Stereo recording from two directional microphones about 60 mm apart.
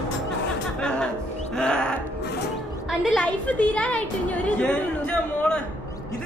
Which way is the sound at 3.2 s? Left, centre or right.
Left.